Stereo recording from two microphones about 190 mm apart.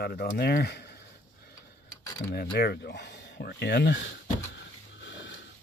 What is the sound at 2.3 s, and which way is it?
Speech, 55° left (ahead or behind).